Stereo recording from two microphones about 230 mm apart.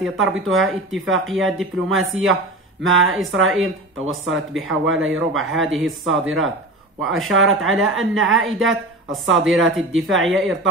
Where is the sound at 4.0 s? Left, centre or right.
Right.